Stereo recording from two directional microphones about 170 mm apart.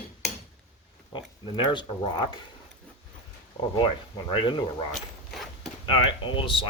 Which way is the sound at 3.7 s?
30° left (ahead or behind).